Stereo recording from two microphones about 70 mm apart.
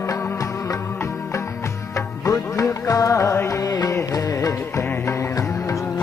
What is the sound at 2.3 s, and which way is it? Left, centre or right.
Music, left.